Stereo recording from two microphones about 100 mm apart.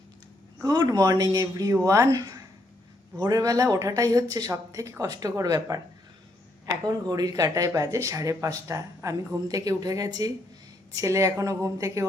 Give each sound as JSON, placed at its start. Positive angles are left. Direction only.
{"t": 0.6, "sound": "speech", "side_deg": -40}